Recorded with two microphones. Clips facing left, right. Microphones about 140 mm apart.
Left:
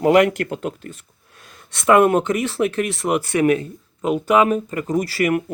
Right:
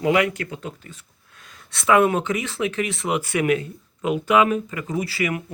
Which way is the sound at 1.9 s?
50° left (ahead or behind).